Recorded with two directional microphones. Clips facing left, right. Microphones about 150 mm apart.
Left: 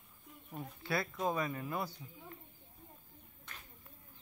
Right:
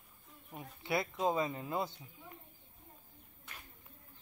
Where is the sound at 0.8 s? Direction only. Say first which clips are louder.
Right 2 dB; 20° right (ahead or behind).